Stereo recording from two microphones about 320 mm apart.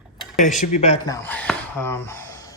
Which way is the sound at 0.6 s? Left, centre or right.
Centre.